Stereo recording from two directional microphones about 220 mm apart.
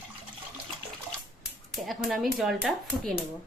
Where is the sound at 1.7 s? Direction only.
Centre (ahead or behind).